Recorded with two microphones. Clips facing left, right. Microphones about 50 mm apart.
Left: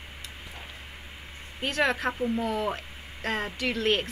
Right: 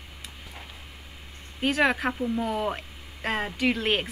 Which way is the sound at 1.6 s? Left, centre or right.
Centre.